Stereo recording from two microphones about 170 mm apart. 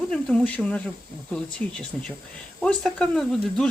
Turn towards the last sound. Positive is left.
turn(degrees=5)  # may be behind; listen again after turning